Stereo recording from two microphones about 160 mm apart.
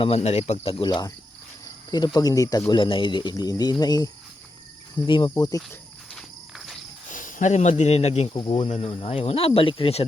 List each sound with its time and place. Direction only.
0.0 s speech: 40° left (ahead or behind)
2.1 s speech: 20° left (ahead or behind)
6.1 s walk: centre (ahead or behind)
7.1 s speech: 55° left (ahead or behind); by 8.5 s 30° left (ahead or behind)
8.5 s speech: 45° left (ahead or behind)